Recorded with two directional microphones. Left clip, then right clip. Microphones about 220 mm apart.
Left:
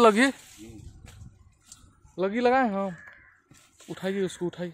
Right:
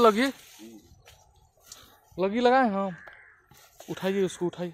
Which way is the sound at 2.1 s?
10° right (ahead or behind).